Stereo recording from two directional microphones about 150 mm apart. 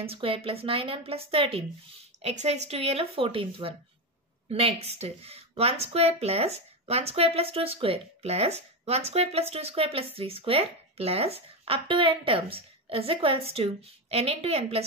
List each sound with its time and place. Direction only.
0.0 s speech: 40° right (ahead or behind)